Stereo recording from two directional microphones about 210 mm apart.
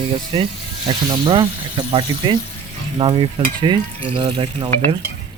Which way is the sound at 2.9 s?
25° right (ahead or behind).